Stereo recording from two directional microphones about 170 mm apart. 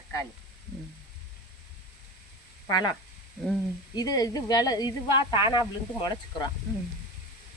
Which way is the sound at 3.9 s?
20° left (ahead or behind).